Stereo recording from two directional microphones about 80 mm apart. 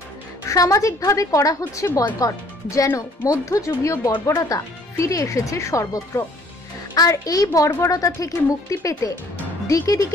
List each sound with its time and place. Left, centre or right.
0.5 s a woman's voice: left